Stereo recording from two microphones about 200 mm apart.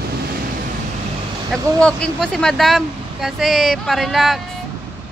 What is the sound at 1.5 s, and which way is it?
Speech, 5° left (ahead or behind).